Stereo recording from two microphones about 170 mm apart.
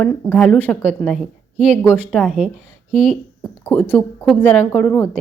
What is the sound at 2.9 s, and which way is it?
Speech, 35° right (ahead or behind).